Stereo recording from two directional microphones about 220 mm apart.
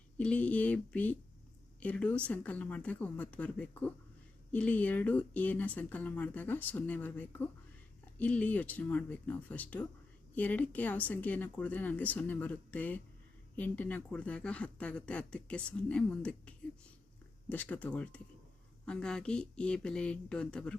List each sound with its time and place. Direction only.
0.2 s speech: 5° left (ahead or behind)